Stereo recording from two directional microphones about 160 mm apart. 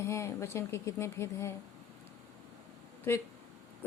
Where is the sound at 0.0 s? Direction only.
15° left (ahead or behind).